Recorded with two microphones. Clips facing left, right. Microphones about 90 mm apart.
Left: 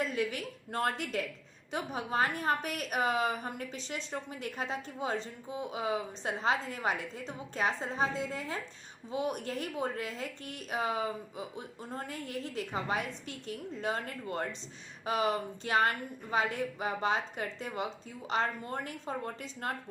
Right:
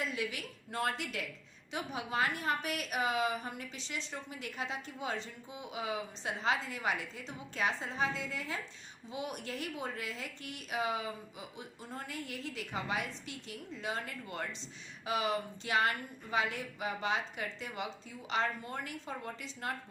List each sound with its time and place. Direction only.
0.0 s a woman's voice: 40° left (ahead or behind)